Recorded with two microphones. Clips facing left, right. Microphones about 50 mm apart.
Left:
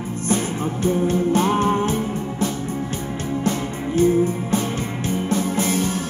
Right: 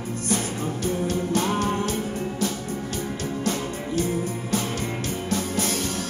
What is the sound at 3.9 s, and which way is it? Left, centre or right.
Music, left.